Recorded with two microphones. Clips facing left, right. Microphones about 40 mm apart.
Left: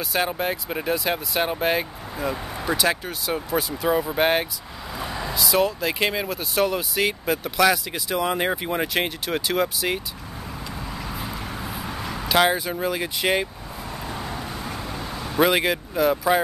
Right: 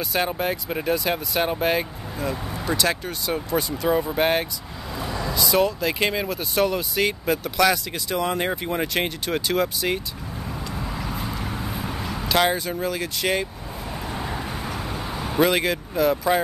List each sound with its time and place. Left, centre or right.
0.0 s speech: centre
4.9 s vehicle: centre
5.4 s speech: centre
10.8 s a sound: centre
14.1 s vehicle: centre
15.3 s speech: centre